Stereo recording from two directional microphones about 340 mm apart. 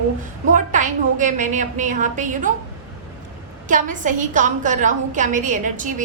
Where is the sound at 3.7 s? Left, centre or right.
Right.